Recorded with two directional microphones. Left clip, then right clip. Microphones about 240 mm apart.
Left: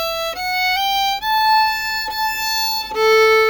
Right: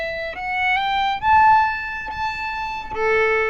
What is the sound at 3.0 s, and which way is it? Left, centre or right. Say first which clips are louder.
Violin: left 6 dB; left.